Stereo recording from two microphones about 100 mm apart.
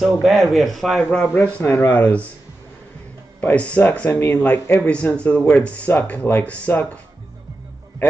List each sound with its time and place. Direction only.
0.0 s a man's voice: centre (ahead or behind)
1.3 s speech: 25° left (ahead or behind)
3.3 s speech: 15° left (ahead or behind)
4.1 s speech: 25° left (ahead or behind)
4.8 s speech: 10° left (ahead or behind)